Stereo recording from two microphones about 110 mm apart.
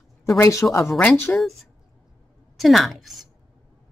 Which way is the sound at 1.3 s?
Centre (ahead or behind).